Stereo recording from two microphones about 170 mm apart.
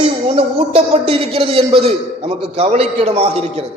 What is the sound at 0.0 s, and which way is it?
A man's voice, 30° right (ahead or behind).